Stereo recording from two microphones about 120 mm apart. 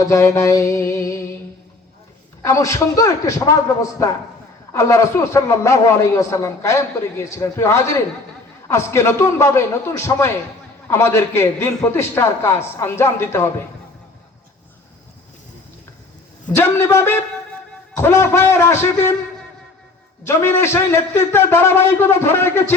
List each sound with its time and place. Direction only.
0.0 s a man's voice: 25° left (ahead or behind)
2.4 s a man's voice: 25° left (ahead or behind)
16.6 s a man's voice: 20° left (ahead or behind)
20.2 s a man's voice: 20° left (ahead or behind)